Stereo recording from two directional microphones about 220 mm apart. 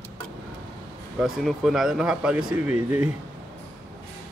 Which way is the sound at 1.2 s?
Centre (ahead or behind).